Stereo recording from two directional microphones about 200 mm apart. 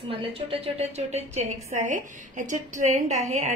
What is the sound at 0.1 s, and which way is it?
A woman's voice, 30° right (ahead or behind).